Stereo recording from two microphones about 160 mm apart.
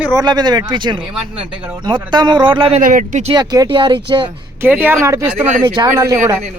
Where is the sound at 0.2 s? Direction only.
25° right (ahead or behind).